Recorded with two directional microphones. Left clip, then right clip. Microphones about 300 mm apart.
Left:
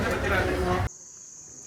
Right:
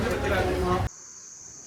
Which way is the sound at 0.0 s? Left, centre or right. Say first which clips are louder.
Even; centre.